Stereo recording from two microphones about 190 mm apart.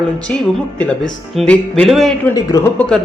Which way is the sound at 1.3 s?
5° left (ahead or behind).